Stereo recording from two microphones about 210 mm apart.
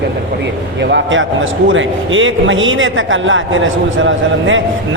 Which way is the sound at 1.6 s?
65° right (ahead or behind).